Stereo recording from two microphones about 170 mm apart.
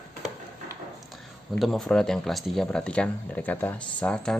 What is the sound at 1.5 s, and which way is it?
Speech, centre (ahead or behind).